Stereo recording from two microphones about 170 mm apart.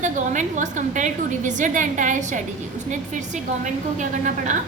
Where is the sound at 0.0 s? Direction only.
45° right (ahead or behind).